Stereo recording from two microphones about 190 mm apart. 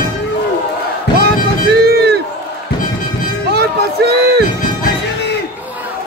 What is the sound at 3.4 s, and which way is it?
Run, 60° right (ahead or behind).